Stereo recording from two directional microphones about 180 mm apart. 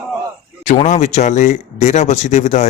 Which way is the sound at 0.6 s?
40° left (ahead or behind).